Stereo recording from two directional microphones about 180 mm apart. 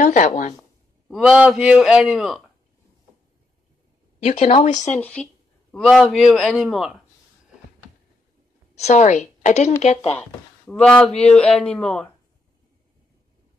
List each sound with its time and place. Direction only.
0.0 s speech: 40° left (ahead or behind)
0.6 s a sound: centre (ahead or behind)
1.3 s speech: 10° right (ahead or behind)
4.2 s a woman's voice: 40° left (ahead or behind)
4.9 s speech: 5° left (ahead or behind)
8.7 s a woman's voice: 40° left (ahead or behind)
10.8 s speech: 5° left (ahead or behind)